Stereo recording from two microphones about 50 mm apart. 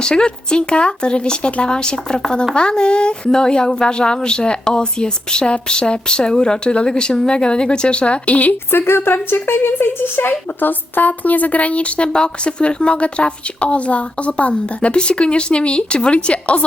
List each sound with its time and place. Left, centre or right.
0.0 s a woman's voice: centre
8.7 s a woman's voice: left